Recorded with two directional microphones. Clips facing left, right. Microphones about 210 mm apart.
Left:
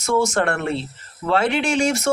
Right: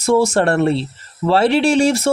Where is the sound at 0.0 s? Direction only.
30° right (ahead or behind).